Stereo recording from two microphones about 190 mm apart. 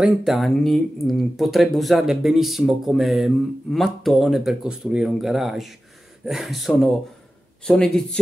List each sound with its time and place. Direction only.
0.0 s speech: centre (ahead or behind)